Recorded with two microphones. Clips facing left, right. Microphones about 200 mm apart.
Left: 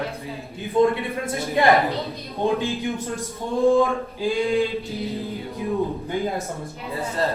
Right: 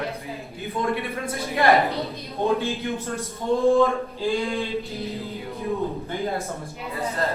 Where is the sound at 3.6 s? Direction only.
15° left (ahead or behind).